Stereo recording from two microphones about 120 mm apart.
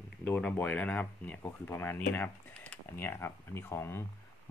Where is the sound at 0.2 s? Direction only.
10° left (ahead or behind).